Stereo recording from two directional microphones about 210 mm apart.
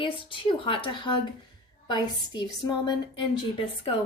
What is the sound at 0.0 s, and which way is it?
Speech, 25° left (ahead or behind).